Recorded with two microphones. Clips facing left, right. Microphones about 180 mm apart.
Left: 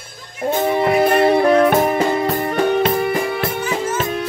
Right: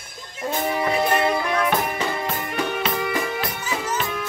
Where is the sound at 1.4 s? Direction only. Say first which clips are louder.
Left 9 dB; 50° left (ahead or behind).